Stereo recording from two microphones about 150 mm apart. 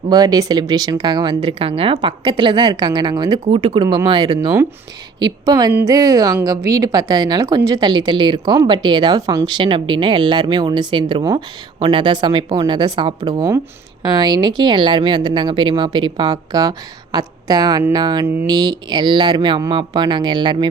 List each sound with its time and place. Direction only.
0.1 s a woman's voice: 25° right (ahead or behind)